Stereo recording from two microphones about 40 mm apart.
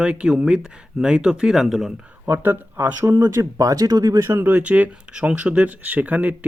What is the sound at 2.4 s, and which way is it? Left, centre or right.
Speech, right.